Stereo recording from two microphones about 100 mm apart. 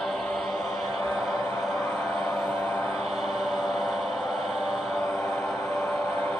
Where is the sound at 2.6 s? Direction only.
25° left (ahead or behind).